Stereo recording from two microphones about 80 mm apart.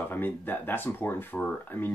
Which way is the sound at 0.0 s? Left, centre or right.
Left.